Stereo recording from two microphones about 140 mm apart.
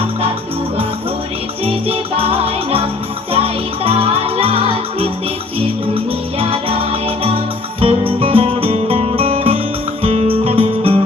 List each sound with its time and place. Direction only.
1.6 s music: 45° right (ahead or behind)